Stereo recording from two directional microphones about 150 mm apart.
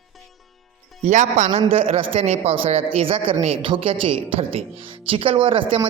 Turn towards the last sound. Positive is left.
turn(degrees=-35)  # may be behind; listen again after turning